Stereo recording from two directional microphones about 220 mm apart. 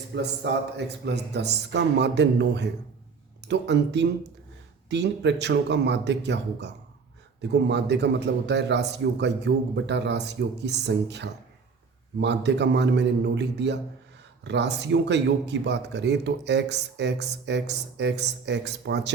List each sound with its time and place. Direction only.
0.1 s speech: 50° right (ahead or behind)